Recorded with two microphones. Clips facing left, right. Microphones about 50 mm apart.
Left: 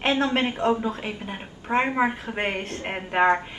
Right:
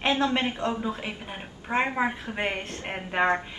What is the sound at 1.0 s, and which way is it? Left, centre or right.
A woman's voice, centre.